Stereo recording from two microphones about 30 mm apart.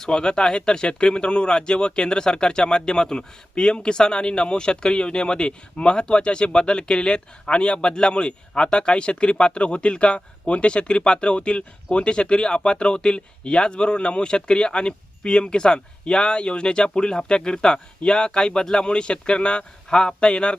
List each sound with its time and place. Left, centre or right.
0.0 s speech: left